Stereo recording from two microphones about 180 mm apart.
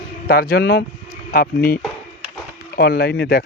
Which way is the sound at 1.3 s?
55° left (ahead or behind).